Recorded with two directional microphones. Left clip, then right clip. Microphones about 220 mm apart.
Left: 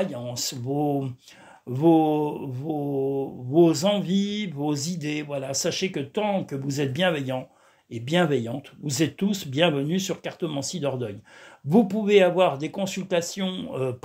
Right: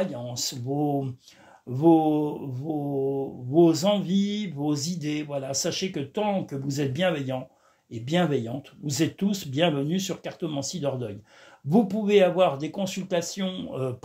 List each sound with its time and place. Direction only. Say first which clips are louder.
0.0 s mantra: left 1 dB; 20° left (ahead or behind)